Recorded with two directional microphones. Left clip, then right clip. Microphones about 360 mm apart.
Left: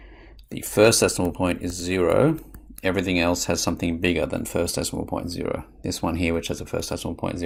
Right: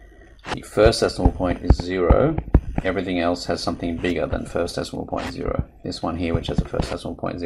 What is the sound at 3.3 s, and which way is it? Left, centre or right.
Speech, left.